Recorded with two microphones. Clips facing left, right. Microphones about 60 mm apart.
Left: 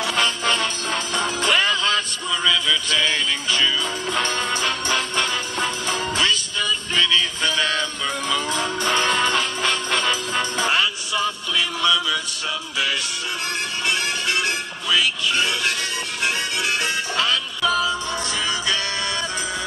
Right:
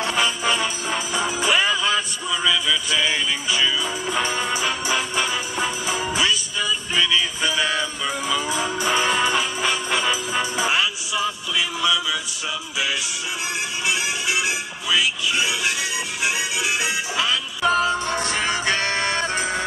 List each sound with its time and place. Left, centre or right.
0.1 s music: centre
13.8 s music: centre
17.6 s music: right